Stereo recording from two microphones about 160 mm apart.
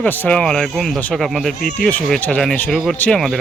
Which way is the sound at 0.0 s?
5° left (ahead or behind).